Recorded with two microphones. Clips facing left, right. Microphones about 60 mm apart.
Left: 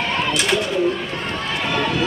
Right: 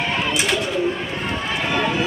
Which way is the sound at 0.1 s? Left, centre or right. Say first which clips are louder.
Left 1 dB; centre.